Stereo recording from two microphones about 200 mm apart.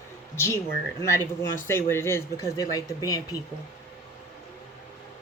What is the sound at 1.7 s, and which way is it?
Speech, 10° left (ahead or behind).